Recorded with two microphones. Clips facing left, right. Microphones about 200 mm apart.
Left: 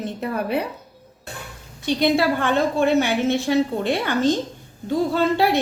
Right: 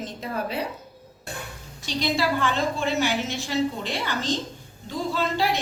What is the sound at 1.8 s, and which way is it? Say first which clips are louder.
A woman's voice: left 7 dB; 55° left (ahead or behind).